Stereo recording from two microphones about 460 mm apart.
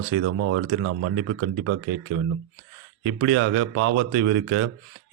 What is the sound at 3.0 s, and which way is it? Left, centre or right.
Speech, right.